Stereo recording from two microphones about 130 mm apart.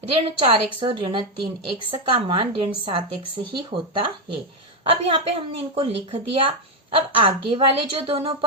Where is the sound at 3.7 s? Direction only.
40° right (ahead or behind).